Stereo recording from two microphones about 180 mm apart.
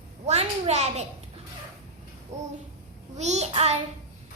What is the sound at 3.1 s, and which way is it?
Child singing, 40° right (ahead or behind).